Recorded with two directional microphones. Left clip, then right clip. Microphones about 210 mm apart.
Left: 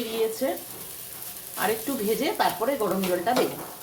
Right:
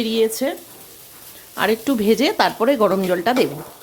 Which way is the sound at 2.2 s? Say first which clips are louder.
Right 8 dB; 55° right (ahead or behind).